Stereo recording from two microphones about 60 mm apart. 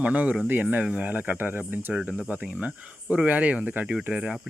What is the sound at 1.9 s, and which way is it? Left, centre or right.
Speech, centre.